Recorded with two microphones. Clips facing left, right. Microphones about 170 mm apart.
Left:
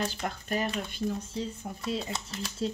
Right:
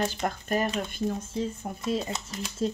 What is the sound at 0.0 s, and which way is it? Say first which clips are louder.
Speech: right 4 dB; 50° right (ahead or behind).